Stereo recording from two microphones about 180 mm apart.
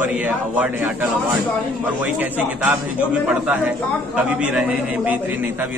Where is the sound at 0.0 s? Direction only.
5° right (ahead or behind).